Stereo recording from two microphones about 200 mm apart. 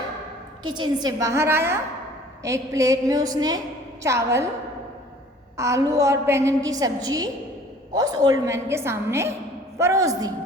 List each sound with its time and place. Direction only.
0.6 s a woman's voice: 20° right (ahead or behind)
5.5 s a woman's voice: 15° right (ahead or behind)